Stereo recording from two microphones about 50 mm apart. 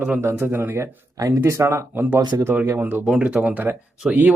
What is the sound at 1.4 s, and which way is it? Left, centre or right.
Speech, right.